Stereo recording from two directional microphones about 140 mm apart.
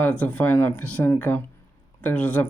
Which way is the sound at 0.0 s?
10° left (ahead or behind).